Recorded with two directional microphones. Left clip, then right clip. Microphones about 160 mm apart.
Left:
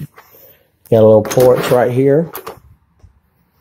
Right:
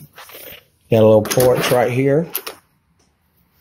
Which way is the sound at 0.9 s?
20° left (ahead or behind).